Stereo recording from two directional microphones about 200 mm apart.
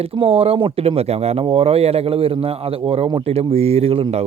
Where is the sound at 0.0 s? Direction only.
30° right (ahead or behind).